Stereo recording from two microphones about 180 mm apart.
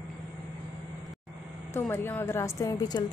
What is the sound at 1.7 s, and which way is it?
Speech, 10° left (ahead or behind).